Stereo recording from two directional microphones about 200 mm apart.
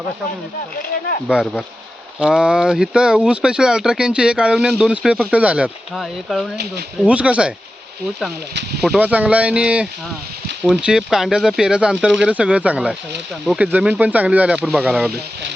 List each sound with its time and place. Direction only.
1.3 s speech: centre (ahead or behind)
8.8 s speech: 5° right (ahead or behind)